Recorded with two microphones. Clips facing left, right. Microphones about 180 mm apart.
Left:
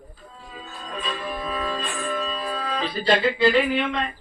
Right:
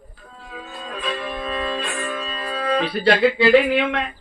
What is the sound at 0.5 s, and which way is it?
Music, 65° right (ahead or behind).